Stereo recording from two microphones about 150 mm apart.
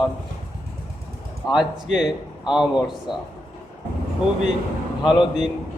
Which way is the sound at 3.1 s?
35° left (ahead or behind).